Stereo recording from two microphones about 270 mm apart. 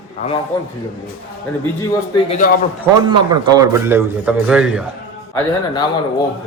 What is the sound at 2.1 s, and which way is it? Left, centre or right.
Speech, left.